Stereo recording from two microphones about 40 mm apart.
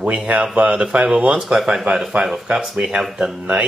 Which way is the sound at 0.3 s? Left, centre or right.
Right.